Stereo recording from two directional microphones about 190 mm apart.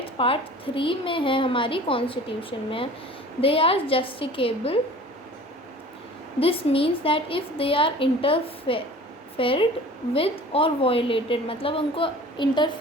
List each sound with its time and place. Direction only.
0.0 s a woman's voice: 30° left (ahead or behind)
6.4 s a woman's voice: 30° left (ahead or behind)